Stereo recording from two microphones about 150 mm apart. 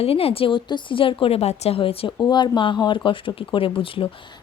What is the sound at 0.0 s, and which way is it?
A woman's voice, 40° left (ahead or behind).